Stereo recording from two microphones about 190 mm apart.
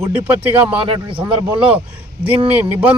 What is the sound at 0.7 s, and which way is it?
Speech, 25° right (ahead or behind).